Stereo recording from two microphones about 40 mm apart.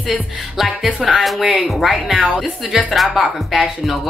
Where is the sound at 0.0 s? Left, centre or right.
Centre.